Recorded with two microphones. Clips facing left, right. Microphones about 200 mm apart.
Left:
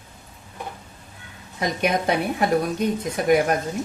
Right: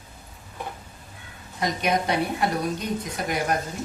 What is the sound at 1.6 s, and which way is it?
Speech, 55° left (ahead or behind).